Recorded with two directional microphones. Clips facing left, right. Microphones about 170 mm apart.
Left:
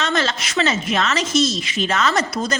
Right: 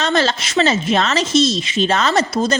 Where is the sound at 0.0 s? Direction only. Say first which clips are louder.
Right 4 dB; 30° right (ahead or behind).